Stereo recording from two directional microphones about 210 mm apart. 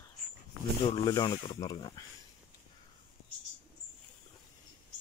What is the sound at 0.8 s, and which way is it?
Speech, 25° left (ahead or behind).